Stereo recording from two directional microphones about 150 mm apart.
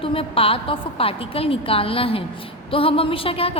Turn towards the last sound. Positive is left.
turn(degrees=40)  # may be behind; listen again after turning